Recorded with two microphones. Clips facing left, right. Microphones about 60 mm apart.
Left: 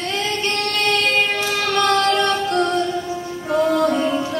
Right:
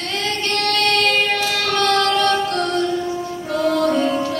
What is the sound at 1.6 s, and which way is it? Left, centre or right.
Female singing, left.